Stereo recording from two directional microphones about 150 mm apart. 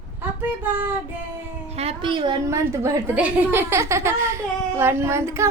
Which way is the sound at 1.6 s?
45° right (ahead or behind).